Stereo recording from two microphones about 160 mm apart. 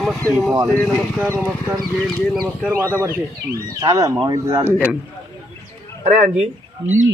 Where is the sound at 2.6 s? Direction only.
15° right (ahead or behind).